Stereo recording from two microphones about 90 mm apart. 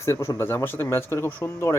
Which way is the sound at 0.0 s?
35° left (ahead or behind).